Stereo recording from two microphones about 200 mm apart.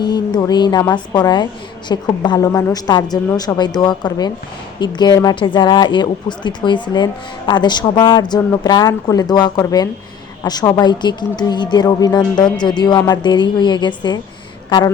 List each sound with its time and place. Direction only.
0.0 s speech: 20° left (ahead or behind)